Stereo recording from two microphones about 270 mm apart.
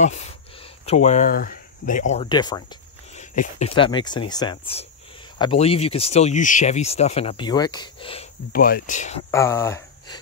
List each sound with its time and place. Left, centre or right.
0.0 s speech: left
8.5 s speech: left
9.3 s speech: centre